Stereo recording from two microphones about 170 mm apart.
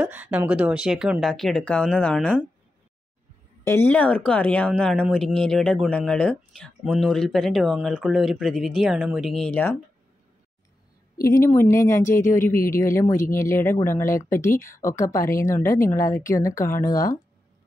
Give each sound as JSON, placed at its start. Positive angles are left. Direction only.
{"t": 0.0, "sound": "speech", "side_deg": -10}
{"t": 3.6, "sound": "speech", "side_deg": 15}
{"t": 11.3, "sound": "speech", "side_deg": 15}